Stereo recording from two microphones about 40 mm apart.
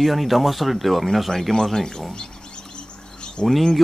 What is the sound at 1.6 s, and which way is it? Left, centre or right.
Speech, centre.